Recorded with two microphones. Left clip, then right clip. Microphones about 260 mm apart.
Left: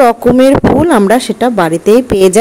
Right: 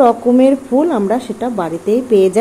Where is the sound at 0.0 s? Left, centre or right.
Left.